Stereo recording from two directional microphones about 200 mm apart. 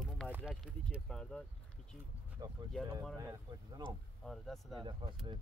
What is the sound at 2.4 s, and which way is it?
Speech, 20° right (ahead or behind).